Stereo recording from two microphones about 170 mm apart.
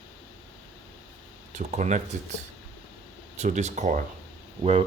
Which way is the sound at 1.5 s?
45° right (ahead or behind).